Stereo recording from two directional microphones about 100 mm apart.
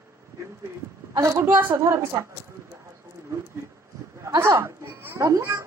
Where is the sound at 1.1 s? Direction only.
40° right (ahead or behind).